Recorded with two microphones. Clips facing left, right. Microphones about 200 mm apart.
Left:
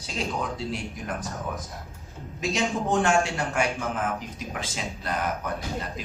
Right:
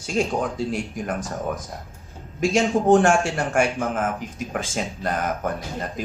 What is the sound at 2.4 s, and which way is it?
A man's voice, 50° right (ahead or behind).